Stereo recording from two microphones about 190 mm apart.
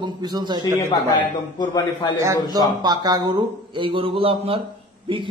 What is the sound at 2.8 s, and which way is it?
Speech, 20° right (ahead or behind).